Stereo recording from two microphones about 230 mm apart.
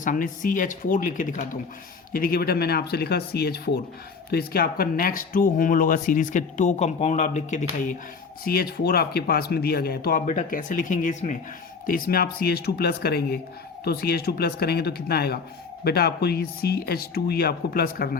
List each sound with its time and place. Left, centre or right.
0.0 s speech: left
8.4 s speech: left